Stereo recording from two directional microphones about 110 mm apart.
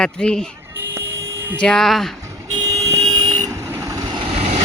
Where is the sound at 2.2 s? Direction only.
30° right (ahead or behind).